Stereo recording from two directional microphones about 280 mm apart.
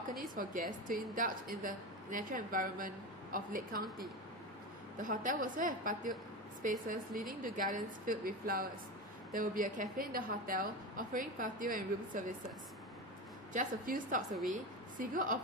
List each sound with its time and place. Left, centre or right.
0.6 s a woman's voice: right
4.9 s a woman's voice: right
13.5 s a woman's voice: right